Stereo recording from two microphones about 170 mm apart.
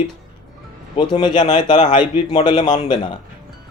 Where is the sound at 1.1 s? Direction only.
25° left (ahead or behind).